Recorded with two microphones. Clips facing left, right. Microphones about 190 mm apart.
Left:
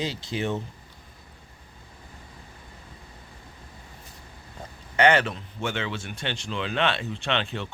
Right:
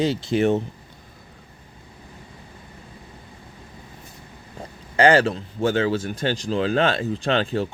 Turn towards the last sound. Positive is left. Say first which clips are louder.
# right 7 dB
turn(degrees=-35)  # may be behind; listen again after turning